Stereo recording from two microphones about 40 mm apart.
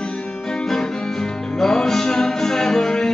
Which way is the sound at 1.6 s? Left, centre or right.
Centre.